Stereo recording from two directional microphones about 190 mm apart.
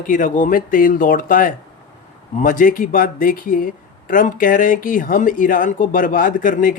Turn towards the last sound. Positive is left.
turn(degrees=45)  # may be behind; listen again after turning